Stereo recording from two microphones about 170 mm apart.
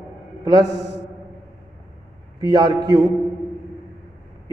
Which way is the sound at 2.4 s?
25° right (ahead or behind).